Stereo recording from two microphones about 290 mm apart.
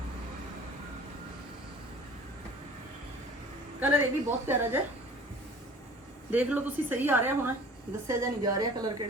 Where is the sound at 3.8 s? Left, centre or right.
Centre.